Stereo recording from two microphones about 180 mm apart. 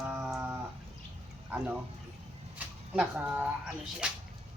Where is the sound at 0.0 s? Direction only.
5° right (ahead or behind).